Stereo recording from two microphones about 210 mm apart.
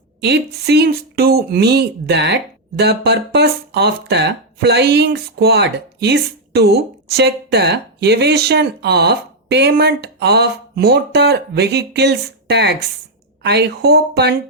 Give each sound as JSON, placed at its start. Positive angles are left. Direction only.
{"t": 0.2, "sound": "speech", "side_deg": -50}